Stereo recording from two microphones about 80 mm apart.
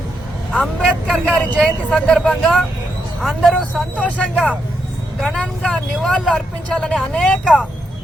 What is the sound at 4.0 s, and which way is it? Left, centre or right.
Speech, centre.